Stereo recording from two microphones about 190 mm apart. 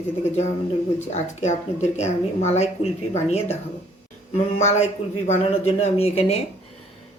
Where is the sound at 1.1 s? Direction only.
35° left (ahead or behind).